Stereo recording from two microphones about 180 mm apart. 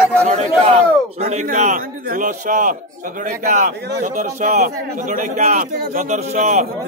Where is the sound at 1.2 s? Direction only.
40° right (ahead or behind).